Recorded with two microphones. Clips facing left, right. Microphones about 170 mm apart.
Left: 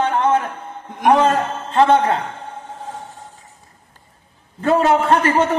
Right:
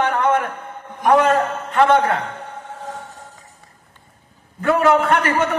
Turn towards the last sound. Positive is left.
turn(degrees=30)  # may be behind; listen again after turning